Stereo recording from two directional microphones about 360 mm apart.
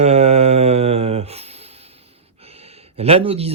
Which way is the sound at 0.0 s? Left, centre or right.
Centre.